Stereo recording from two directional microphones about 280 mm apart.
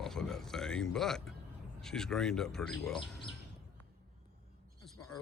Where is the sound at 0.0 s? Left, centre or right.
Centre.